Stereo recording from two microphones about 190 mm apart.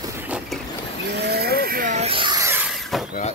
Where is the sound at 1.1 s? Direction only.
60° right (ahead or behind); by 2.7 s 10° right (ahead or behind).